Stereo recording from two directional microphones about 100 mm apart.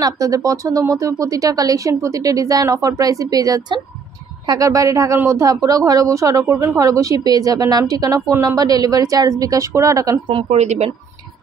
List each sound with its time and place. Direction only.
0.0 s a woman's voice: 35° right (ahead or behind)
10.2 s speech: 80° right